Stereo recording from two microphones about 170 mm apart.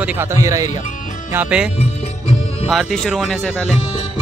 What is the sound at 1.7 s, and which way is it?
Music, 40° left (ahead or behind).